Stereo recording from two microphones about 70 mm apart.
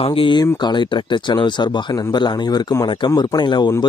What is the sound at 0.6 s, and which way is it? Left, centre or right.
Speech, left.